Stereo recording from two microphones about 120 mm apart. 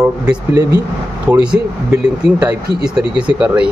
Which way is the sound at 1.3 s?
15° right (ahead or behind).